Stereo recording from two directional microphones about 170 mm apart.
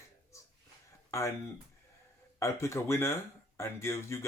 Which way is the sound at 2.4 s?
15° left (ahead or behind).